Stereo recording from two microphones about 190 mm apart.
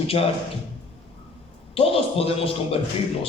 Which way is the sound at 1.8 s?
30° left (ahead or behind).